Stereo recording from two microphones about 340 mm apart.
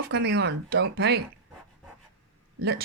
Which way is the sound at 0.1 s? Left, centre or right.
Right.